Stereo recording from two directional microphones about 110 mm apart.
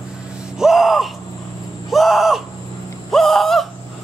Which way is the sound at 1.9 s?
Centre (ahead or behind).